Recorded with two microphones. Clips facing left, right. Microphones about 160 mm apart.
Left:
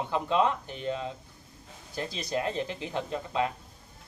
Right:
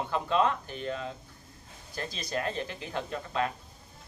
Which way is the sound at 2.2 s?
15° left (ahead or behind).